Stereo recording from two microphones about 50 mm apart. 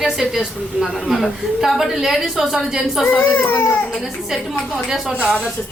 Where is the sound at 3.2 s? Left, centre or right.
Left.